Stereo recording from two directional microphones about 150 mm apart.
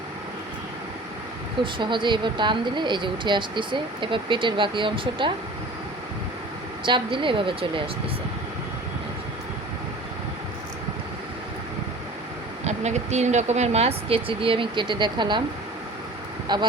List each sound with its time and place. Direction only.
1.6 s speech: 30° right (ahead or behind)
6.8 s speech: 35° right (ahead or behind)
12.6 s speech: 50° right (ahead or behind); by 15.4 s 30° right (ahead or behind)
16.5 s speech: 30° right (ahead or behind)